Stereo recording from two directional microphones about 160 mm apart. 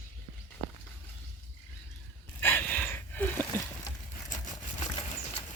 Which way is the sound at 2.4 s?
10° left (ahead or behind).